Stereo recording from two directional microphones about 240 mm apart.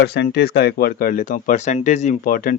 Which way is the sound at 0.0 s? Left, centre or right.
Left.